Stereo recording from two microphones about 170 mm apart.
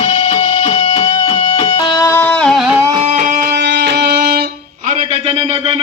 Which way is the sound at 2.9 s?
45° right (ahead or behind).